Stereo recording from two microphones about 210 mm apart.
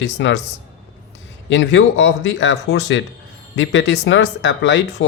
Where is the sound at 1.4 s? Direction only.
60° left (ahead or behind).